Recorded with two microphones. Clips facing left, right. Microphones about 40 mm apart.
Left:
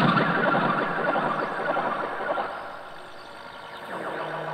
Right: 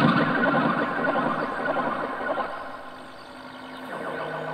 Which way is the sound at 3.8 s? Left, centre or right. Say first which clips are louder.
Even; centre.